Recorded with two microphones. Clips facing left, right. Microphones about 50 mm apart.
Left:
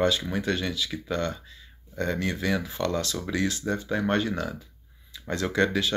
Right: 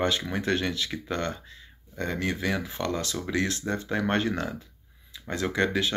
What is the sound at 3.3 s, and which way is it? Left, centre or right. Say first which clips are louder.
Speech: even; right.